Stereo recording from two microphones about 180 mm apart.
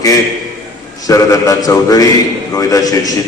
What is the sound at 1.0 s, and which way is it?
A man's voice, 20° left (ahead or behind).